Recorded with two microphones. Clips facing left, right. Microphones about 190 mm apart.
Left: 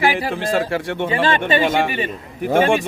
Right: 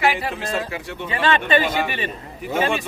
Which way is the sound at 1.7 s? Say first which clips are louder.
Left 5 dB; 50° left (ahead or behind).